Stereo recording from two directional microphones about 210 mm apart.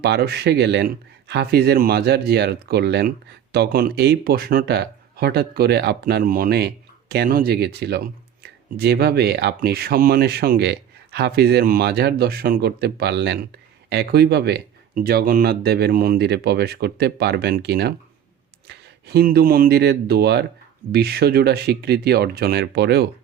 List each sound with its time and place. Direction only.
0.0 s speech: 50° right (ahead or behind)